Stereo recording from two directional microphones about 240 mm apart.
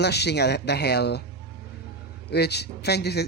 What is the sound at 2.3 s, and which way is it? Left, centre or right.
Speech, left.